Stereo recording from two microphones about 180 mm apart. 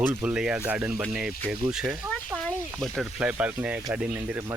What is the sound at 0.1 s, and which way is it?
Speech, 10° right (ahead or behind).